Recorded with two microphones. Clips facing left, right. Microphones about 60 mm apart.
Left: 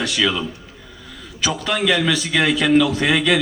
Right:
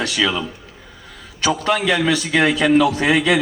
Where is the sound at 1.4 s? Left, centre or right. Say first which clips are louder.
Right 4 dB; right.